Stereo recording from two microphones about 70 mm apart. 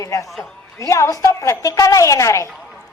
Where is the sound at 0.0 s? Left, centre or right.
Left.